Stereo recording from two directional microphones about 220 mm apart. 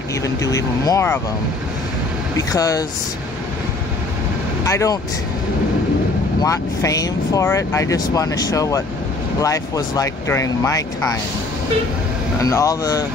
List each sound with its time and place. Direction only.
0.2 s speech: 15° left (ahead or behind)
2.3 s speech: 15° left (ahead or behind)
4.6 s speech: 15° left (ahead or behind)
6.4 s speech: 15° left (ahead or behind)
12.4 s speech: 15° left (ahead or behind)